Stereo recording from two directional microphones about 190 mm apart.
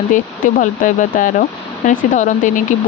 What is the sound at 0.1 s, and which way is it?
Speech, 45° left (ahead or behind).